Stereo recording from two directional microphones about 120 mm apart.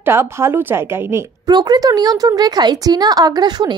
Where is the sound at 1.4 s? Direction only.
35° right (ahead or behind).